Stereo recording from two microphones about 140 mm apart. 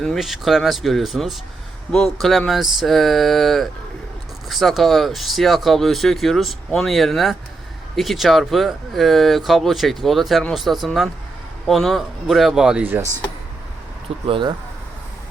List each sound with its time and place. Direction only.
0.0 s speech: centre (ahead or behind)
14.3 s speech: 40° right (ahead or behind)